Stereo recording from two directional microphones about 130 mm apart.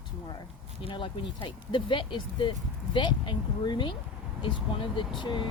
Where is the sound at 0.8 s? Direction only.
40° left (ahead or behind).